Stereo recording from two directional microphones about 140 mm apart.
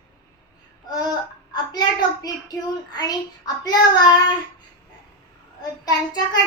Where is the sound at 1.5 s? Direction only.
30° left (ahead or behind).